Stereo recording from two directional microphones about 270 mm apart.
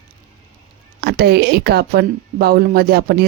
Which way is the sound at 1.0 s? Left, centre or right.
Right.